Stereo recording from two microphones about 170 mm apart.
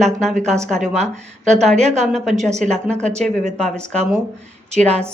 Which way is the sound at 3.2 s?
5° left (ahead or behind).